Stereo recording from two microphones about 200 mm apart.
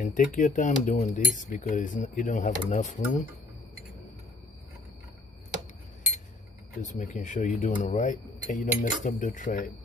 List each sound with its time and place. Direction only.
0.0 s speech: 40° left (ahead or behind)
6.8 s speech: 40° left (ahead or behind)